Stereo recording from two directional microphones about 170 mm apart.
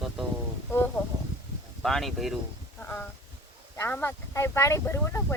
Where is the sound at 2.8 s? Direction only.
10° left (ahead or behind).